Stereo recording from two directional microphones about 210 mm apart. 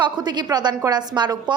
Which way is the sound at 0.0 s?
20° right (ahead or behind).